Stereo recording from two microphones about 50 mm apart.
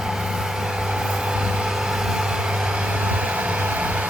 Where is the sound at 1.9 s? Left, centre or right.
Centre.